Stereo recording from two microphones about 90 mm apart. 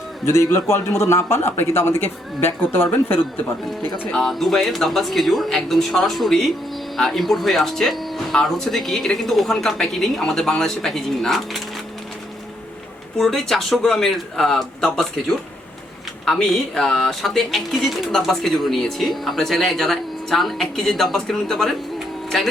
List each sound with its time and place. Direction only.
0.3 s a man's voice: 30° left (ahead or behind)
4.1 s speech: 5° left (ahead or behind)
13.1 s speech: 5° left (ahead or behind)